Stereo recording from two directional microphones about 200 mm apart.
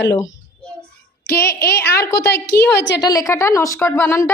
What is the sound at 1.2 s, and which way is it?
A woman's voice, 50° left (ahead or behind).